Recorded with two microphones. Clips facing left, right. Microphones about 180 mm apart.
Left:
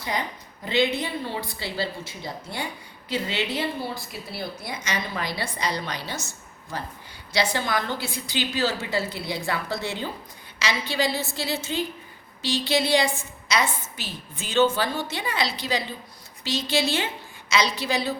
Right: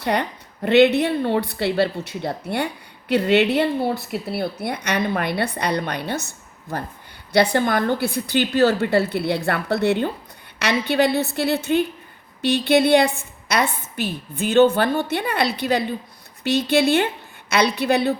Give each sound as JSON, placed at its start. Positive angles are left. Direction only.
{"t": 0.0, "sound": "a woman's voice", "side_deg": -65}